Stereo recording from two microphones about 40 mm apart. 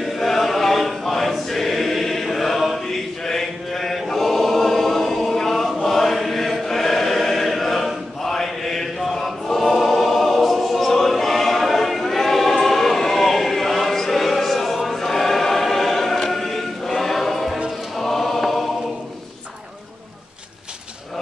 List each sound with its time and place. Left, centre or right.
0.0 s choir: centre